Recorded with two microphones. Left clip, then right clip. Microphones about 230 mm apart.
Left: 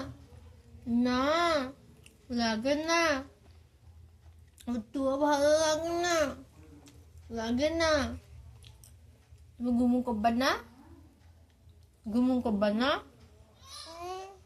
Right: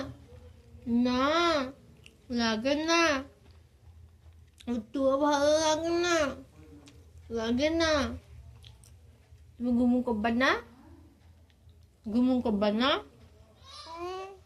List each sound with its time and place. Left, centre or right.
0.9 s babbling: left
4.5 s speech: left
9.6 s speech: left
12.1 s speech: left
14.0 s a sound: centre